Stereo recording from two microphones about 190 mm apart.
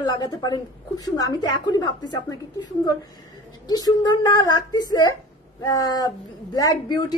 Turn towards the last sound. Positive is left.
turn(degrees=20)  # may be behind; listen again after turning